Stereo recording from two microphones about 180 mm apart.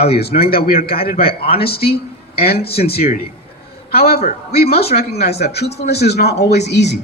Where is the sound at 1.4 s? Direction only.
30° left (ahead or behind).